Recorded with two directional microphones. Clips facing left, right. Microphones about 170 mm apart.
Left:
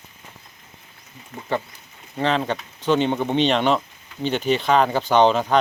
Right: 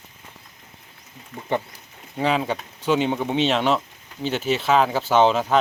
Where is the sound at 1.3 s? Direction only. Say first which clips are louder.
Even; 40° left (ahead or behind).